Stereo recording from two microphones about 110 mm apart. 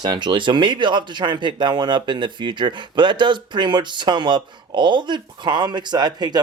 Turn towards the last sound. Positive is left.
turn(degrees=-40)  # may be behind; listen again after turning